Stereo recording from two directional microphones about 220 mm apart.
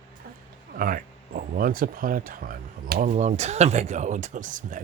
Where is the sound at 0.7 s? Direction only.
40° right (ahead or behind).